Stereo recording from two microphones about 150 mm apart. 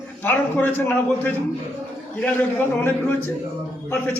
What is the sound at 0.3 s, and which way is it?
A man's voice, 15° left (ahead or behind).